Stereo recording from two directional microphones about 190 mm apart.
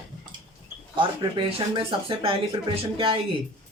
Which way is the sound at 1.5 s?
25° right (ahead or behind).